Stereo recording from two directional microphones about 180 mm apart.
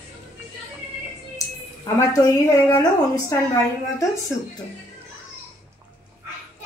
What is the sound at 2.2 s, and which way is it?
Speech, 20° left (ahead or behind).